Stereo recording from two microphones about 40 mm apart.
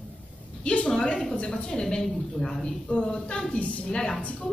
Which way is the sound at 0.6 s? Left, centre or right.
Left.